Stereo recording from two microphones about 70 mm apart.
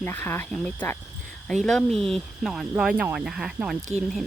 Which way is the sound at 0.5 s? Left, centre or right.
Centre.